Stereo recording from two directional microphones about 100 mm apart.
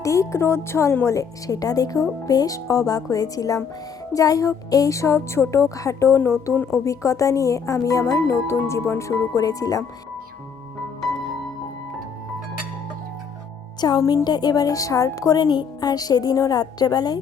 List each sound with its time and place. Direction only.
0.0 s a woman's voice: 30° left (ahead or behind)
13.8 s a woman's voice: 40° left (ahead or behind)